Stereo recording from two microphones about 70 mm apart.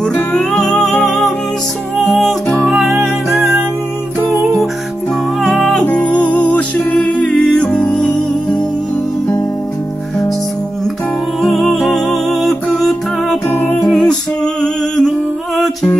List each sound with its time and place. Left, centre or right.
0.0 s music: centre
2.4 s music: centre
2.9 s music: centre
5.4 s music: centre
5.9 s music: centre
11.8 s music: centre
13.5 s music: left
13.8 s music: centre